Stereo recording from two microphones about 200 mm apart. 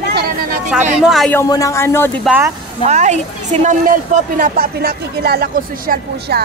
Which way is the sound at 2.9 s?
35° right (ahead or behind).